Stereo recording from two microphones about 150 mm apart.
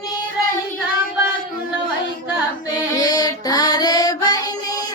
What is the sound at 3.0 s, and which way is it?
Music, 25° left (ahead or behind).